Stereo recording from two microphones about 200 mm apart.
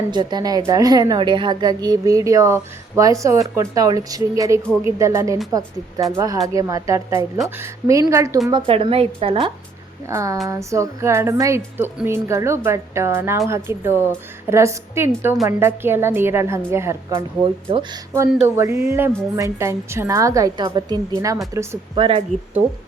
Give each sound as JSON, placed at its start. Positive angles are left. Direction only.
{"t": 0.1, "sound": "a woman's voice", "side_deg": -20}
{"t": 10.1, "sound": "a woman's voice", "side_deg": -15}
{"t": 17.2, "sound": "a woman's voice", "side_deg": -25}
{"t": 18.3, "sound": "a woman's voice", "side_deg": -10}